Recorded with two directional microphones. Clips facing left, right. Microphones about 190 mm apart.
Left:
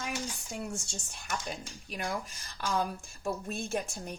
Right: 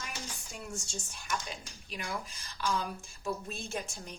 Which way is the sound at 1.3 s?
50° left (ahead or behind).